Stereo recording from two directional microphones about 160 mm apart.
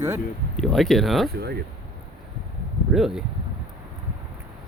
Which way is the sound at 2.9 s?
5° right (ahead or behind).